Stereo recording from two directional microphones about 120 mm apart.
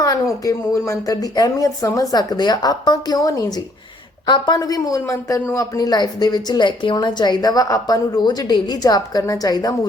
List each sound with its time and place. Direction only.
0.4 s speech: 25° left (ahead or behind)